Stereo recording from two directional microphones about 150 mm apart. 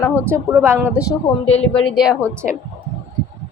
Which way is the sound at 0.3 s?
15° right (ahead or behind).